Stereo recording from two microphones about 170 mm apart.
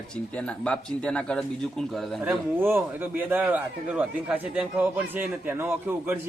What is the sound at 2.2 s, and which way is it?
A man's voice, 10° right (ahead or behind).